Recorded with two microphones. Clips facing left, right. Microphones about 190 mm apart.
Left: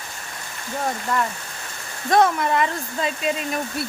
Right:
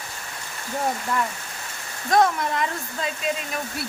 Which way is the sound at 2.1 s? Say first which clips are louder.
Left 2 dB; centre (ahead or behind).